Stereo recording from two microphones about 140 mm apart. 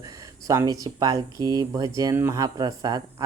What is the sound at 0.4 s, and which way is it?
Speech, 25° right (ahead or behind).